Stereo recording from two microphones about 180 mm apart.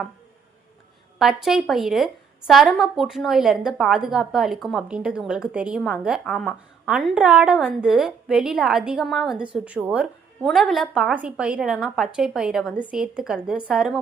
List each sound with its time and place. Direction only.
1.2 s a woman's voice: centre (ahead or behind)